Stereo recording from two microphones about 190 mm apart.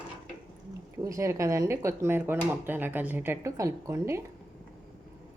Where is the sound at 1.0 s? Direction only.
15° right (ahead or behind).